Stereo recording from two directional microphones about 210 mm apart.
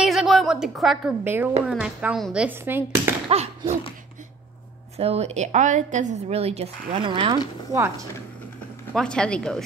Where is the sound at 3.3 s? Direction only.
30° right (ahead or behind).